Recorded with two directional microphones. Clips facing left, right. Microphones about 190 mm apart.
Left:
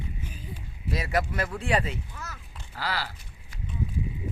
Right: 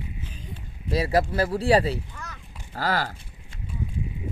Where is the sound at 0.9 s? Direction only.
30° right (ahead or behind).